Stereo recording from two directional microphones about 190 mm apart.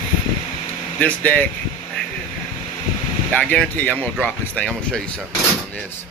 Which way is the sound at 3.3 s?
5° left (ahead or behind).